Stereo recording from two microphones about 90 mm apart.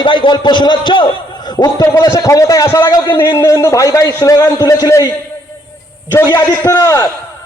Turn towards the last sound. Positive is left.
turn(degrees=40)  # may be behind; listen again after turning